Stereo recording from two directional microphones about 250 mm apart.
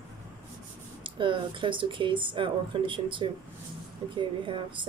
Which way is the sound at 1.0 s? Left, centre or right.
Centre.